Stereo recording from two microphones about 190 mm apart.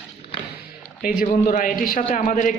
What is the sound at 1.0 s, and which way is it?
A man's voice, 45° left (ahead or behind).